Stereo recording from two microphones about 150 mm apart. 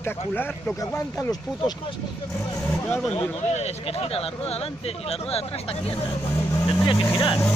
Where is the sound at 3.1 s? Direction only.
45° left (ahead or behind).